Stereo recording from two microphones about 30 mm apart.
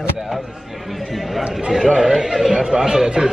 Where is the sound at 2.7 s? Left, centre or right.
Centre.